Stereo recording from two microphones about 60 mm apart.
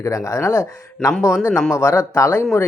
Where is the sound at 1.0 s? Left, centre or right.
Centre.